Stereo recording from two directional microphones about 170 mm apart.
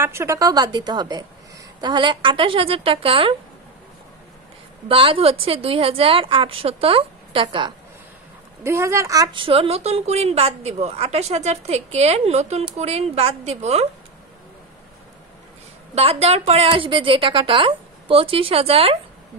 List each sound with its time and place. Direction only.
0.0 s a woman's voice: 15° right (ahead or behind); by 3.3 s 30° right (ahead or behind)
4.8 s a woman's voice: 30° right (ahead or behind)
8.6 s a woman's voice: 15° right (ahead or behind); by 13.8 s 40° right (ahead or behind)
15.9 s a woman's voice: 35° right (ahead or behind)